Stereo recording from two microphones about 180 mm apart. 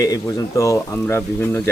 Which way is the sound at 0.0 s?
20° left (ahead or behind).